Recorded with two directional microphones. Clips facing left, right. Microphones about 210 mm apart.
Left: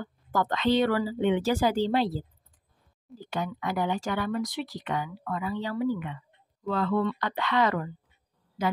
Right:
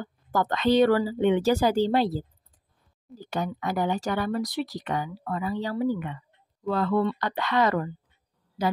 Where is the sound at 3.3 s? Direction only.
40° right (ahead or behind).